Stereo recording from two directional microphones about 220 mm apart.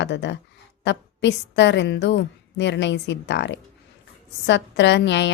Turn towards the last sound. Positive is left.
turn(degrees=55)  # may be behind; listen again after turning